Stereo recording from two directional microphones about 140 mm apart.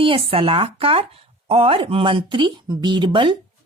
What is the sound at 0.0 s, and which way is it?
A woman's voice, 40° right (ahead or behind).